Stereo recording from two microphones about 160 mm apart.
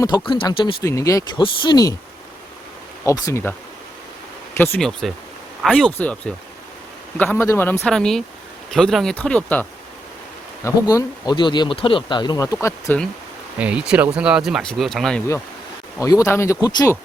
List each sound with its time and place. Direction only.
0.4 s speech: 25° left (ahead or behind)
1.4 s speech: 30° left (ahead or behind)
3.0 s speech: 20° left (ahead or behind)
4.5 s speech: 15° left (ahead or behind)
4.8 s speech: 5° left (ahead or behind)
10.6 s speech: 20° left (ahead or behind)
12.9 s speech: 10° left (ahead or behind)
13.6 s speech: 5° right (ahead or behind)
16.0 s speech: 20° left (ahead or behind)